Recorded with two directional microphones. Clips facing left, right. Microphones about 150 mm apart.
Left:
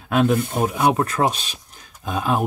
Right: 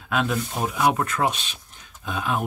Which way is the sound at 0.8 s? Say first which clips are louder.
Left 2 dB; 35° left (ahead or behind).